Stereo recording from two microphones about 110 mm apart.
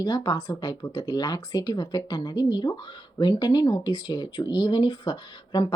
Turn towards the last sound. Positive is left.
turn(degrees=40)  # may be behind; listen again after turning